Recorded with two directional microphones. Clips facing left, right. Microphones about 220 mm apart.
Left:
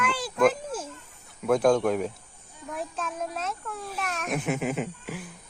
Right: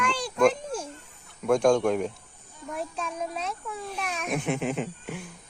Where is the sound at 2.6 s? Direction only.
Centre (ahead or behind).